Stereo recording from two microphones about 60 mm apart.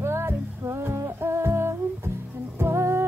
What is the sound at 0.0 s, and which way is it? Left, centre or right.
Music, right.